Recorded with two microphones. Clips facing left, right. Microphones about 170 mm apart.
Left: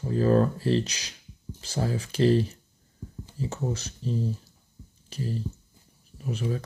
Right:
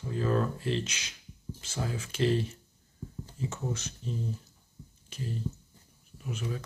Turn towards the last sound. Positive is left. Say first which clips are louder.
# left 6 dB
turn(degrees=35)  # may be behind; listen again after turning